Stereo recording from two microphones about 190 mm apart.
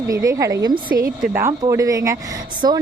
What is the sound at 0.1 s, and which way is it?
Speech, 15° right (ahead or behind).